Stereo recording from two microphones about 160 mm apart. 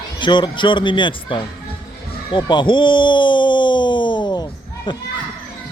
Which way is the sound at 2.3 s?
30° left (ahead or behind).